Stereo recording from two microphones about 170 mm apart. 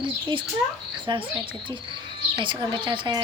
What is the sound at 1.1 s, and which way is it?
Speech, 25° right (ahead or behind).